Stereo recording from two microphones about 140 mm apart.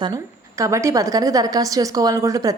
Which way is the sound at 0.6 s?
20° right (ahead or behind).